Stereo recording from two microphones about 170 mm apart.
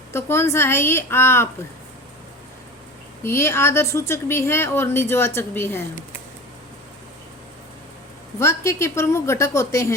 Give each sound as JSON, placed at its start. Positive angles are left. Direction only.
{"t": 0.1, "sound": "a woman's voice", "side_deg": 15}
{"t": 3.2, "sound": "a woman's voice", "side_deg": 15}
{"t": 8.4, "sound": "a woman's voice", "side_deg": 15}